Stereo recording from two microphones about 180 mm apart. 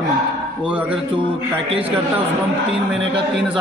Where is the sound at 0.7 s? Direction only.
5° right (ahead or behind).